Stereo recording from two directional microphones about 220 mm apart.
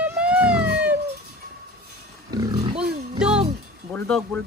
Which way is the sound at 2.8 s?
5° right (ahead or behind).